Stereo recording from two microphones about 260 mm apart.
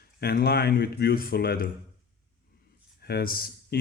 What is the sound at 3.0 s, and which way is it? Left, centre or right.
Speech, left.